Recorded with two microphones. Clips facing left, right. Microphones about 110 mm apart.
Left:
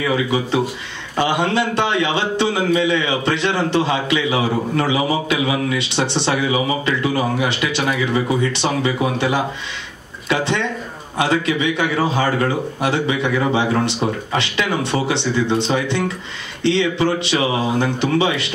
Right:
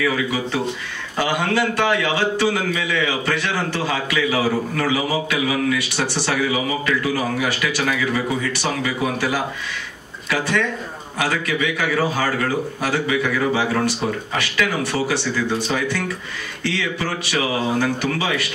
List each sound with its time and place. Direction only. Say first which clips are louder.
0.0 s a man's voice: left 2 dB; 25° left (ahead or behind)